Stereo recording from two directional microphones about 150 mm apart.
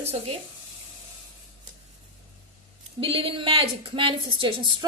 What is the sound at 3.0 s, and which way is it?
A woman's voice, 40° right (ahead or behind).